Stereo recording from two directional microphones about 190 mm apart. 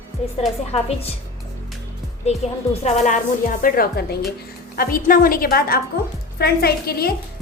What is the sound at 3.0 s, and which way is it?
A woman's voice, 45° left (ahead or behind).